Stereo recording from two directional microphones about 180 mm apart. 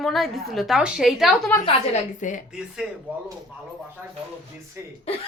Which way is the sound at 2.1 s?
45° left (ahead or behind).